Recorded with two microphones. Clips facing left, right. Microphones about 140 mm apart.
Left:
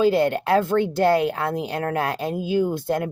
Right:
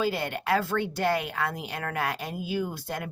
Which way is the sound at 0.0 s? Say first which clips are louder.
Left 10 dB; 25° left (ahead or behind).